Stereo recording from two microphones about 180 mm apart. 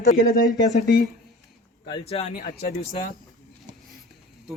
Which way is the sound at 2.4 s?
55° left (ahead or behind).